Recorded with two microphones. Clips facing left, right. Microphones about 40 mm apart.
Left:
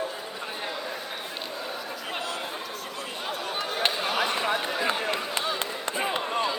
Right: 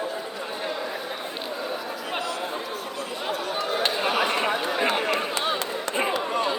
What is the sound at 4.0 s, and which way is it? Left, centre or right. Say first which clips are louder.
Chatter: right 3 dB; centre.